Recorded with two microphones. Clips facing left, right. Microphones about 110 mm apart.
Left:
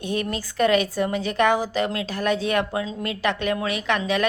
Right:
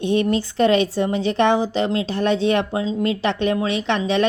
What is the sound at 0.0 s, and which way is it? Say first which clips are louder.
A woman's voice: right 8 dB; 30° right (ahead or behind).